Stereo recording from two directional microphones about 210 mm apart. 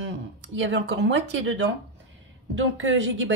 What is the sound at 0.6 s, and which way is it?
A woman's voice, 60° right (ahead or behind).